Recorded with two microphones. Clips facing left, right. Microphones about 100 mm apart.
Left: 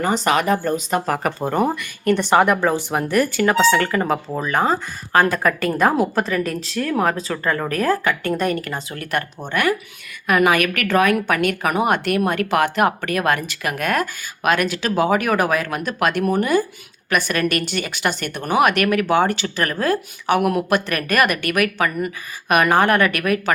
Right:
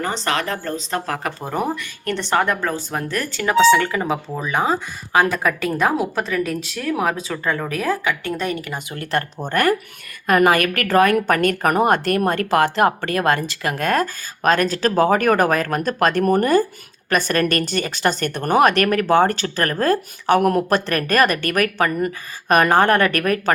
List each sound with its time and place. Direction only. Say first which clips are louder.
0.0 s speech: left 4 dB; 10° left (ahead or behind)
3.7 s speech: right 1 dB; centre (ahead or behind)
8.9 s speech: right 3 dB; 25° right (ahead or behind)
9.5 s speech: right 2 dB; 40° right (ahead or behind)